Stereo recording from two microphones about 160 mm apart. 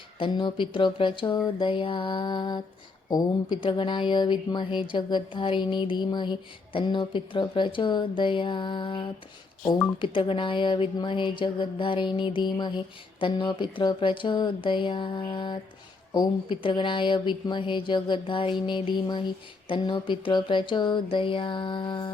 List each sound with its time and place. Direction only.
0.2 s speech: 30° left (ahead or behind)